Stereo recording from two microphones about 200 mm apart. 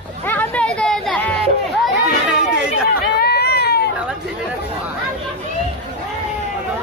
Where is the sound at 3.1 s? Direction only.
55° left (ahead or behind).